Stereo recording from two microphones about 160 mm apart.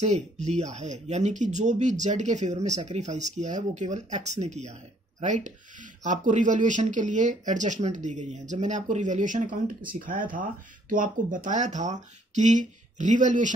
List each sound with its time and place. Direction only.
0.0 s speech: 45° right (ahead or behind)